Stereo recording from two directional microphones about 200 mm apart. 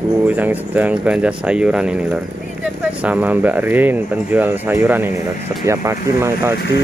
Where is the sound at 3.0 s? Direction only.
10° right (ahead or behind).